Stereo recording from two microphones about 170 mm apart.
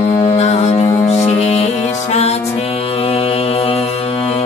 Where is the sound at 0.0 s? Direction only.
35° left (ahead or behind).